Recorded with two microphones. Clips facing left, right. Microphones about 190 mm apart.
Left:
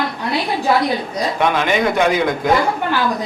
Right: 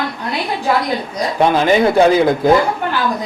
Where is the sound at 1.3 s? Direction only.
35° right (ahead or behind).